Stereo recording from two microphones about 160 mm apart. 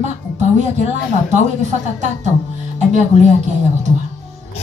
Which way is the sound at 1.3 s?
50° right (ahead or behind).